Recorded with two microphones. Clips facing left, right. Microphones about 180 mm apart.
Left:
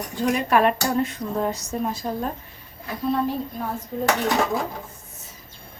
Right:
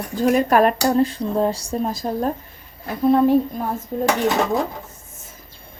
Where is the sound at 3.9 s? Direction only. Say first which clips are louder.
Right 4 dB; 45° right (ahead or behind).